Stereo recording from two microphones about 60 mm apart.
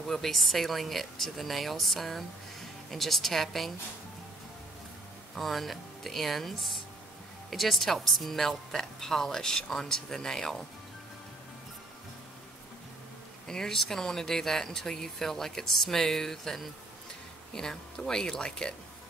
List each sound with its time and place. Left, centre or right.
0.0 s speech: centre
5.3 s speech: centre
13.5 s speech: centre